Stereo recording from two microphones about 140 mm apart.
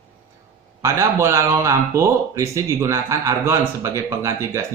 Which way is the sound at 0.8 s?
20° right (ahead or behind).